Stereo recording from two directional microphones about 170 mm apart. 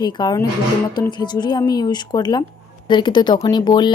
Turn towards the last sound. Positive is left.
turn(degrees=25)  # may be behind; listen again after turning